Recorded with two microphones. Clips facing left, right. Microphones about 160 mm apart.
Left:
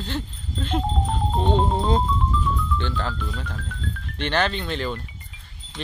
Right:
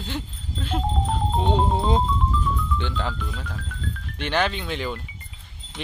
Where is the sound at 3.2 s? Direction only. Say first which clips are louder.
Left 2 dB; 5° right (ahead or behind).